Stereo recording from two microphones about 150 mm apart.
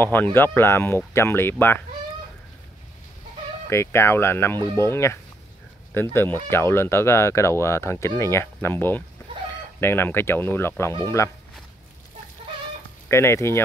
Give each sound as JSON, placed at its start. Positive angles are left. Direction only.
{"t": 0.0, "sound": "speech", "side_deg": 15}
{"t": 3.6, "sound": "speech", "side_deg": 20}
{"t": 13.1, "sound": "speech", "side_deg": 15}